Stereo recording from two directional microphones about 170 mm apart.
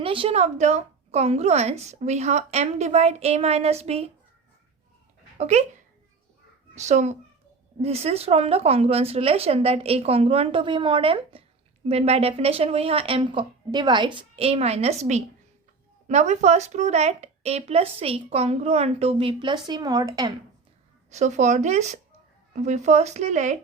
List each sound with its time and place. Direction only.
0.0 s a woman's voice: 30° right (ahead or behind)
5.4 s speech: 40° right (ahead or behind)
6.7 s a woman's voice: 45° right (ahead or behind); by 20.3 s 20° right (ahead or behind)
21.1 s speech: 45° right (ahead or behind)